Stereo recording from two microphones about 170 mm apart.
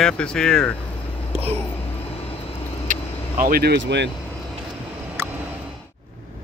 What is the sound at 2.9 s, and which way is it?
Vehicle, 50° right (ahead or behind).